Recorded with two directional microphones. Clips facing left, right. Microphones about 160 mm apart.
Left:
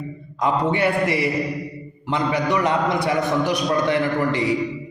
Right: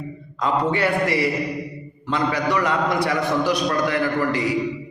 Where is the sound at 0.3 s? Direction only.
20° left (ahead or behind).